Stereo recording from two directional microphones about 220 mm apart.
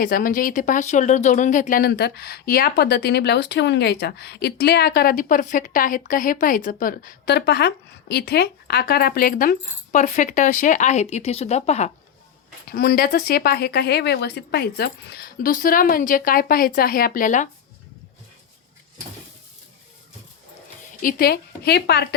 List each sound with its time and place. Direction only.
0.0 s speech: 40° left (ahead or behind)
12.7 s a woman's voice: 45° left (ahead or behind)
21.0 s a woman's voice: 40° left (ahead or behind)